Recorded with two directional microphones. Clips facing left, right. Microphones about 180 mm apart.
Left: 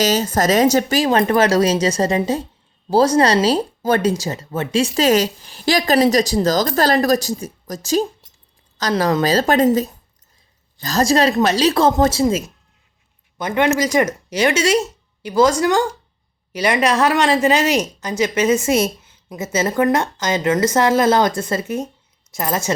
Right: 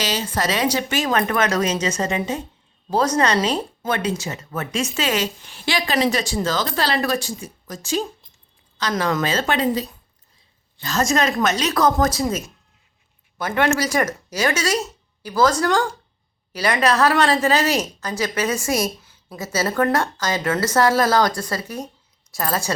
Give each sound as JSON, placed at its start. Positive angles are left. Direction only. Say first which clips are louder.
{"t": 0.0, "sound": "speech", "louder": "left 7 dB", "side_deg": 40}
{"t": 13.4, "sound": "a woman's voice", "louder": "left 3 dB", "side_deg": 20}